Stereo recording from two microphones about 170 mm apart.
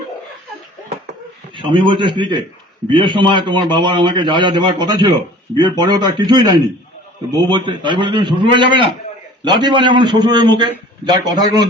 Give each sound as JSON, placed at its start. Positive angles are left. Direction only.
{"t": 1.5, "sound": "a man's voice", "side_deg": -30}